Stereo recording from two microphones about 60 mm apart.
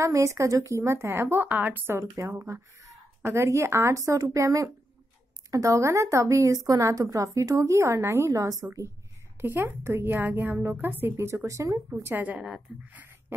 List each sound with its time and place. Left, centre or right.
0.0 s a woman's voice: right
1.5 s a woman's voice: right
2.0 s a woman's voice: right
9.4 s a woman's voice: right
11.1 s speech: right
12.2 s a woman's voice: right
12.7 s speech: centre